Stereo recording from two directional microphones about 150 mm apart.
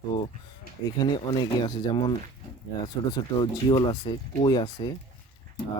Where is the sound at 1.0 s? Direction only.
30° left (ahead or behind).